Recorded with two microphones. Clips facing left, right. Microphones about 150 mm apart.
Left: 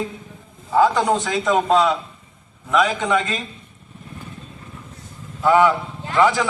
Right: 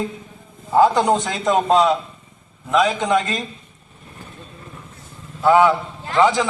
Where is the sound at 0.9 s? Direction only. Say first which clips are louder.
Right 1 dB; 30° right (ahead or behind).